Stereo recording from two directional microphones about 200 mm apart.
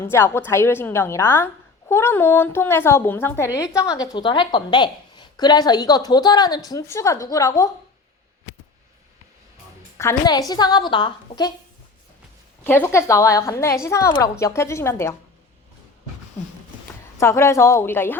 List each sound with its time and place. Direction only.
0.0 s a woman's voice: 10° left (ahead or behind)
10.0 s a woman's voice: 15° left (ahead or behind)
12.6 s a woman's voice: 10° left (ahead or behind)
17.2 s a woman's voice: 15° left (ahead or behind)